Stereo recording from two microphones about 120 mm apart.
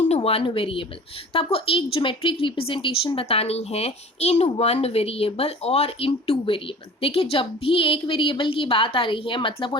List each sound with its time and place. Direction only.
0.2 s speech: 50° left (ahead or behind)